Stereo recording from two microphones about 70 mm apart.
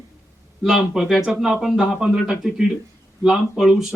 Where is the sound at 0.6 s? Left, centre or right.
Centre.